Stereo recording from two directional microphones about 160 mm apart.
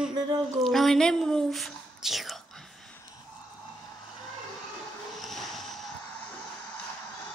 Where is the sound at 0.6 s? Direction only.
Centre (ahead or behind).